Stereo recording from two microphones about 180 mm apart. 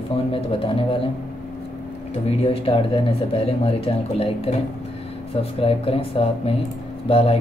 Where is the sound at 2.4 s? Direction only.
30° left (ahead or behind).